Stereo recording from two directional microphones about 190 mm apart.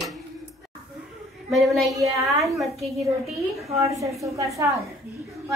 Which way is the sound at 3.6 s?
15° right (ahead or behind).